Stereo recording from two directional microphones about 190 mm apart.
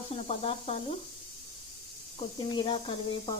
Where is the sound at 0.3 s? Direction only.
30° left (ahead or behind).